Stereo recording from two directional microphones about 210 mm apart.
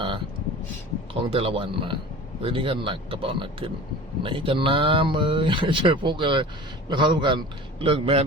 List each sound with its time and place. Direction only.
1.1 s speech: 25° right (ahead or behind)